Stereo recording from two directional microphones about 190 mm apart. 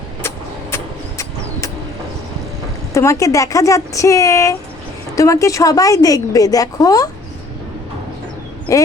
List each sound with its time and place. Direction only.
0.2 s a sound: 15° left (ahead or behind)
2.9 s speech: 15° left (ahead or behind)
8.7 s speech: 15° left (ahead or behind)